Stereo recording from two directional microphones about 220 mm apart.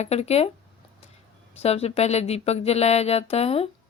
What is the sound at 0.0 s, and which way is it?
Speech, 30° left (ahead or behind).